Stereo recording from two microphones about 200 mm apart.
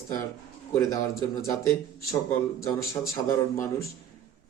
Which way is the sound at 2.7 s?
15° left (ahead or behind).